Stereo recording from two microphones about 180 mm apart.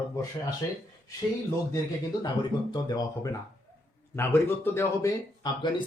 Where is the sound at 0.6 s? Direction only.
20° left (ahead or behind).